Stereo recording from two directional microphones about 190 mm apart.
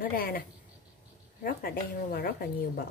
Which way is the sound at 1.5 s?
50° left (ahead or behind).